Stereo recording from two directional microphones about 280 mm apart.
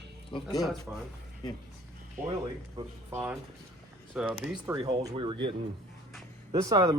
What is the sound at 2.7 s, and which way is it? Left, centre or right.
Speech, centre.